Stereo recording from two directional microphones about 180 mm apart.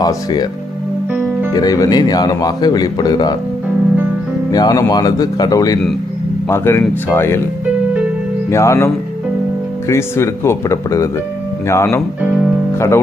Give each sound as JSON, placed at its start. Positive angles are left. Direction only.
{"t": 0.0, "sound": "a man's voice", "side_deg": 20}
{"t": 1.5, "sound": "a man's voice", "side_deg": 20}
{"t": 4.5, "sound": "a man's voice", "side_deg": 20}
{"t": 8.4, "sound": "speech", "side_deg": 15}
{"t": 9.9, "sound": "speech", "side_deg": 15}